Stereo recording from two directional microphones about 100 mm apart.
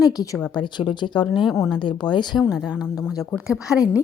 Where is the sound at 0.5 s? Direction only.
55° left (ahead or behind).